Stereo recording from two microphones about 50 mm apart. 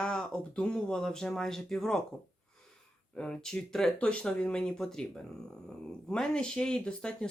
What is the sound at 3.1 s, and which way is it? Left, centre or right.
Speech, centre.